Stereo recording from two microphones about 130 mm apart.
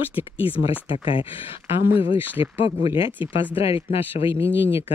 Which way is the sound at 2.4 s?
45° left (ahead or behind).